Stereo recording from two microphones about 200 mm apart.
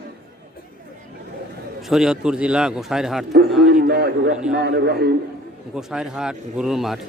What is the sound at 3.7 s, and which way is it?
A man's voice, 50° right (ahead or behind).